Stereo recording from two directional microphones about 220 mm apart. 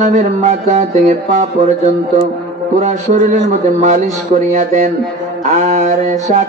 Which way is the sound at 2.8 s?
30° right (ahead or behind).